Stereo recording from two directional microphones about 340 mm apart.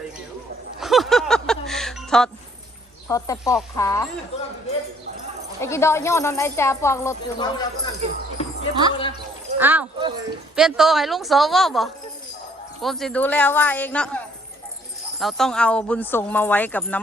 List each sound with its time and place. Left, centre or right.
0.8 s music: centre
3.1 s speech: centre
5.6 s speech: centre
8.4 s a sound: centre
8.9 s speech: centre
9.6 s speech: centre
15.2 s speech: centre